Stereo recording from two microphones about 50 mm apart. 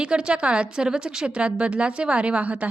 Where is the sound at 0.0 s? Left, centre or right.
Right.